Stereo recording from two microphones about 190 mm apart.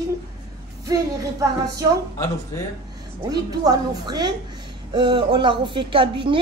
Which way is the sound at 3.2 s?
20° right (ahead or behind).